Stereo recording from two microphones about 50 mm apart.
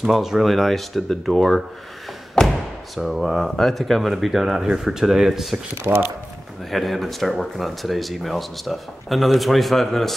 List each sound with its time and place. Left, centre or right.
0.0 s speech: centre
2.4 s thump: centre
3.0 s speech: centre
5.9 s speech: right
6.7 s speech: centre